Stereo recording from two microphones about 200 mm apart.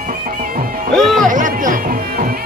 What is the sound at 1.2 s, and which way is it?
Music, 40° right (ahead or behind).